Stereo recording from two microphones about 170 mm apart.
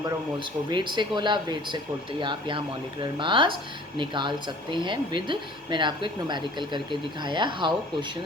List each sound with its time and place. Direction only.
0.0 s speech: 30° right (ahead or behind)